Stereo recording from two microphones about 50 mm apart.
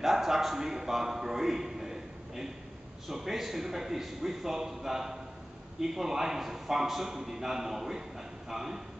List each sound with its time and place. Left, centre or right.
0.0 s a man's voice: centre